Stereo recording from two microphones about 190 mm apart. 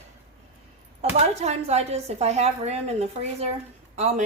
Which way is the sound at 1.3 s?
35° right (ahead or behind).